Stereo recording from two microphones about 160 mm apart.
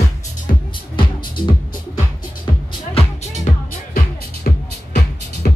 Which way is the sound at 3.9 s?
65° left (ahead or behind).